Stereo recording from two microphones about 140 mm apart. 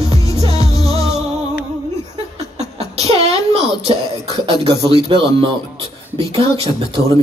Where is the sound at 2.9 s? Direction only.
50° right (ahead or behind).